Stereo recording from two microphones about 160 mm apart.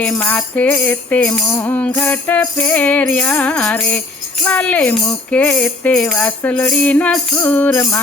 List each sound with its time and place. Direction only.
0.2 s music: 10° left (ahead or behind)